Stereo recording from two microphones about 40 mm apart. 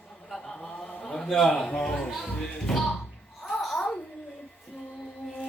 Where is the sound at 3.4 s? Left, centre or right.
Centre.